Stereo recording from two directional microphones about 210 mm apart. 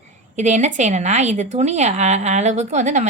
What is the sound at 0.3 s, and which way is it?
A woman's voice, 35° right (ahead or behind).